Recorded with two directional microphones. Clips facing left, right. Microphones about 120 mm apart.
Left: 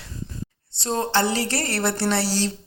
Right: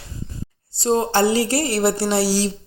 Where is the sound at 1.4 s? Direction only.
10° right (ahead or behind).